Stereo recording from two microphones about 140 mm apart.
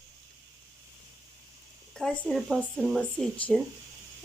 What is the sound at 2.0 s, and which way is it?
Speech, 5° left (ahead or behind).